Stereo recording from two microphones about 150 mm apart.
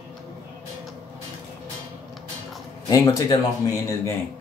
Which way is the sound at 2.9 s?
25° left (ahead or behind).